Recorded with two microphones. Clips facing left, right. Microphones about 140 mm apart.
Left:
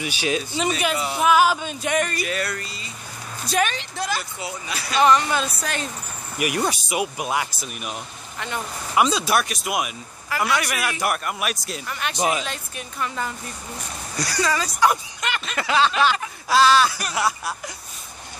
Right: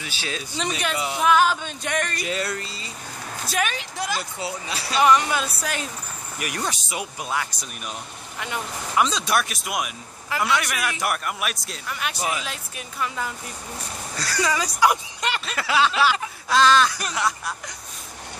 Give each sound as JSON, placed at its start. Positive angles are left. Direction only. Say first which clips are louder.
{"t": 0.0, "sound": "speech", "louder": "left 8 dB", "side_deg": 15}
{"t": 2.2, "sound": "speech", "louder": "even", "side_deg": -20}
{"t": 3.4, "sound": "speech", "louder": "left 4 dB", "side_deg": -5}
{"t": 4.4, "sound": "speech", "louder": "right 1 dB", "side_deg": -30}
{"t": 4.9, "sound": "speech", "louder": "left 1 dB", "side_deg": -10}
{"t": 6.3, "sound": "speech", "louder": "left 6 dB", "side_deg": 10}
{"t": 8.9, "sound": "speech", "louder": "left 2 dB", "side_deg": 10}
{"t": 12.2, "sound": "speech", "louder": "left 7 dB", "side_deg": 20}
{"t": 12.4, "sound": "speech", "louder": "left 2 dB", "side_deg": -5}
{"t": 14.1, "sound": "speech", "louder": "left 2 dB", "side_deg": 15}
{"t": 14.4, "sound": "speech", "louder": "left 1 dB", "side_deg": -15}
{"t": 15.4, "sound": "snicker", "louder": "left 2 dB", "side_deg": 0}
{"t": 16.4, "sound": "speech", "louder": "left 1 dB", "side_deg": 5}